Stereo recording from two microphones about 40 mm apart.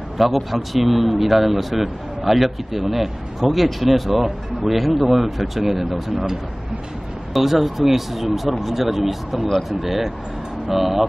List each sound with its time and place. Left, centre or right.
0.2 s speech: centre
7.3 s speech: centre